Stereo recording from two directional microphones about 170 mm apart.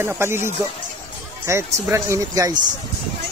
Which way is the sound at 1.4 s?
15° right (ahead or behind).